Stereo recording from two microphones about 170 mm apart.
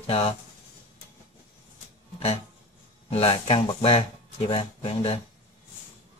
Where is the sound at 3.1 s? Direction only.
35° left (ahead or behind).